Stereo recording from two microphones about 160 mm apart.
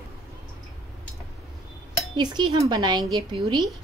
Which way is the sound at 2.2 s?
25° right (ahead or behind).